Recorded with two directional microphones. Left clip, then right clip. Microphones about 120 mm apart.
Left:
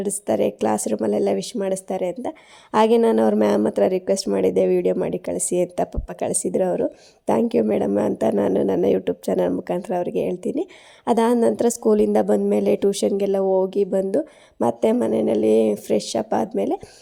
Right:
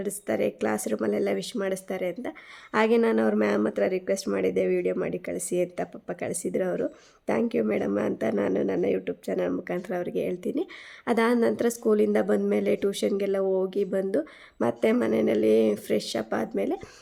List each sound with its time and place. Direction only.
0.0 s speech: 35° left (ahead or behind)
9.5 s speech: 30° left (ahead or behind)